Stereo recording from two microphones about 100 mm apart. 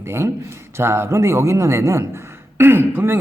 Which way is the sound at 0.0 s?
25° right (ahead or behind).